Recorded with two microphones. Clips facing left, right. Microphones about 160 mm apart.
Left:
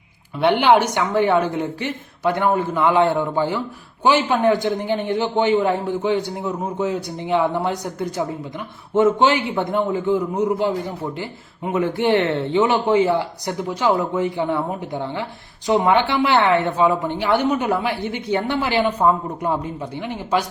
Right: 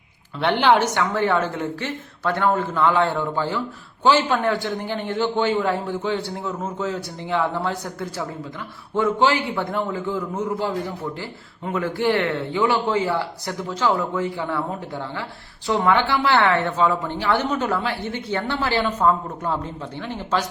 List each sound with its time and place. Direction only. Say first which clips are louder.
0.3 s a man's voice: left 3 dB; 10° left (ahead or behind)